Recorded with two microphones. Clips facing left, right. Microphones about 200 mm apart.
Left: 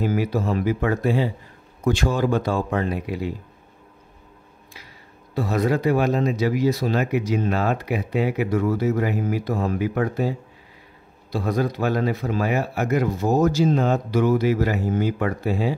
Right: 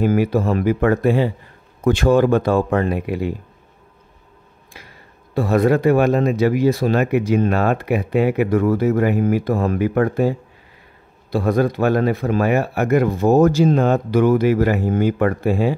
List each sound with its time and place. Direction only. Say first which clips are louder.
0.0 s speech: right 6 dB; 55° right (ahead or behind)
4.7 s speech: right 4 dB; 55° right (ahead or behind)
11.3 s speech: right 6 dB; 55° right (ahead or behind)